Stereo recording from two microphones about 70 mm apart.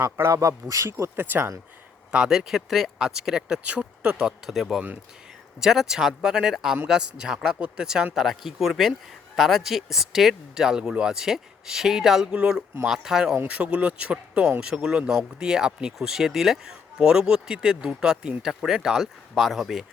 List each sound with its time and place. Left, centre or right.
0.0 s speech: right
0.3 s speech: right
1.1 s speech: right
2.1 s speech: centre
4.4 s speech: centre